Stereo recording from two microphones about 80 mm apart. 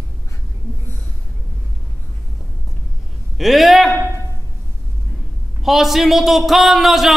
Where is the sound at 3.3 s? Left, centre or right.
Centre.